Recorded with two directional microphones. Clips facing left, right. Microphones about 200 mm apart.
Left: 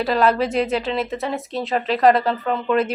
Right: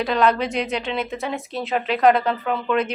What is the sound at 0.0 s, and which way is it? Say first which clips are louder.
Speech: left 1 dB; 5° left (ahead or behind).